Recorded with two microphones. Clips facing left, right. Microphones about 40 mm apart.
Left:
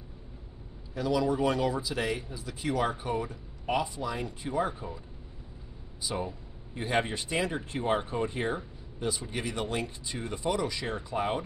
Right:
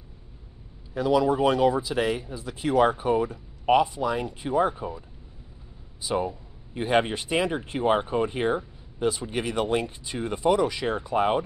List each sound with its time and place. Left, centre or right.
0.9 s speech: right
6.0 s speech: centre